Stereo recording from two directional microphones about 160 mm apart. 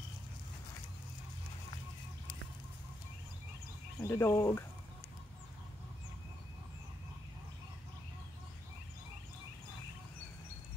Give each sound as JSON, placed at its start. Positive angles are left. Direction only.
{"t": 4.0, "sound": "speech", "side_deg": 15}